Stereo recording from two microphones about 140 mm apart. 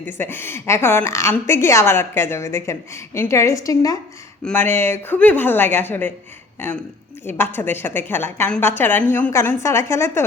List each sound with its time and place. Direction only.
0.0 s a woman's voice: 15° left (ahead or behind)
7.3 s a woman's voice: 15° left (ahead or behind)